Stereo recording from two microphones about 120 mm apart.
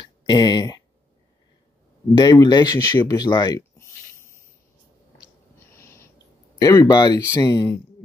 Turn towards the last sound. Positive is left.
turn(degrees=30)  # may be behind; listen again after turning